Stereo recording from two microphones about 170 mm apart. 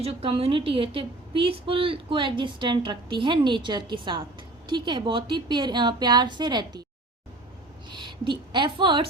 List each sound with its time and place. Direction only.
0.0 s a woman's voice: 35° right (ahead or behind)
7.9 s a woman's voice: 25° right (ahead or behind)